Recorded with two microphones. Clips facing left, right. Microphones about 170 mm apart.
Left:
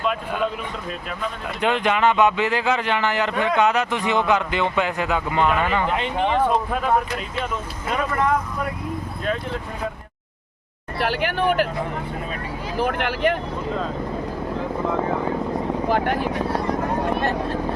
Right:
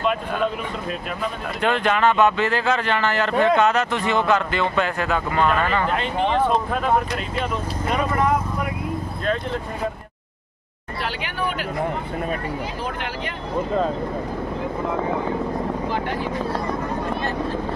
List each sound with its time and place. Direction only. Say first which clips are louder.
1.6 s speech: even; 15° left (ahead or behind)
11.0 s speech: left 6 dB; 50° left (ahead or behind)
12.8 s speech: left 7 dB; 60° left (ahead or behind)
15.9 s speech: left 4 dB; 60° left (ahead or behind)